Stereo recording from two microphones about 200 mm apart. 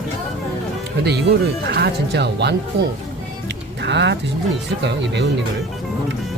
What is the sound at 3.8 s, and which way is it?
Speech, 60° right (ahead or behind).